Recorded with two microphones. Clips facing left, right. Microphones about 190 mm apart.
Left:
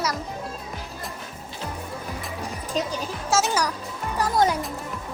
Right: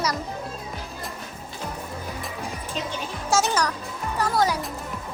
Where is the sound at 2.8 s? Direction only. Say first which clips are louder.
Left 5 dB; 40° left (ahead or behind).